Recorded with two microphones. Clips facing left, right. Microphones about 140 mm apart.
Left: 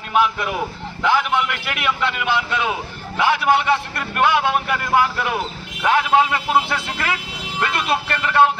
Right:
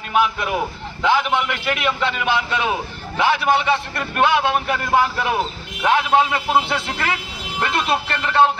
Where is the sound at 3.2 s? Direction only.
15° left (ahead or behind).